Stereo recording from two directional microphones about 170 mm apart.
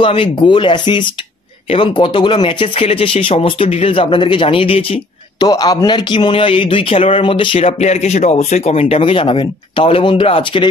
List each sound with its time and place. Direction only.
0.0 s speech: 30° left (ahead or behind)
5.5 s speech: 20° left (ahead or behind)